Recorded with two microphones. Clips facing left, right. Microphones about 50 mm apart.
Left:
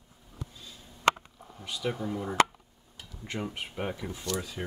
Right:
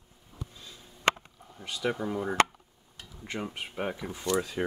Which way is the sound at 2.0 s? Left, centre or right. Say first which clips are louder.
Right 1 dB; right.